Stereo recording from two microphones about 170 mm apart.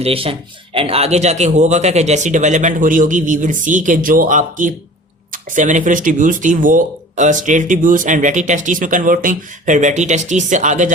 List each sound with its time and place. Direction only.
0.0 s speech: 35° right (ahead or behind)